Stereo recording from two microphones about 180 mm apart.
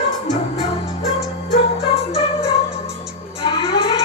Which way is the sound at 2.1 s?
35° left (ahead or behind).